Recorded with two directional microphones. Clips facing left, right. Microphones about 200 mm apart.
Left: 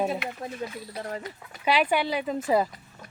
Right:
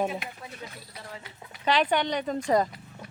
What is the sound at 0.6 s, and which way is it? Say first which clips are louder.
Speech: left 9 dB; 50° left (ahead or behind).